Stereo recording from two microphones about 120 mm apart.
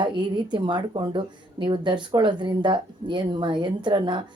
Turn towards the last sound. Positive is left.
turn(degrees=-40)  # may be behind; listen again after turning